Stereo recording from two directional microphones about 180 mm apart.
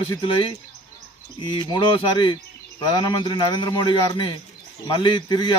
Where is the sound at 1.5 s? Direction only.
25° left (ahead or behind).